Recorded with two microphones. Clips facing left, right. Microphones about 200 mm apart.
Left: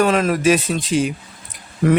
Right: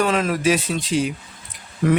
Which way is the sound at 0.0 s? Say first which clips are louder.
Left 3 dB; 45° left (ahead or behind).